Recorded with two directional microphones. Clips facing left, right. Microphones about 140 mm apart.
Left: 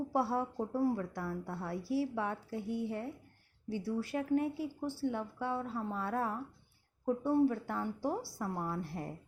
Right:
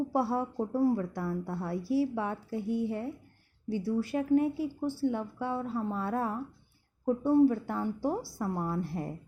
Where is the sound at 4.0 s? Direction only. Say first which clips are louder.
Right 6 dB; 20° right (ahead or behind).